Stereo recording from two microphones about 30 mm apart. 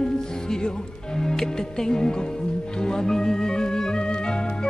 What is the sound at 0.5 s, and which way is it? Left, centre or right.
Speech, left.